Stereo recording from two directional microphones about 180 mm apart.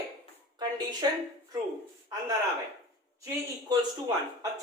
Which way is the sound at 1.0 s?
25° right (ahead or behind).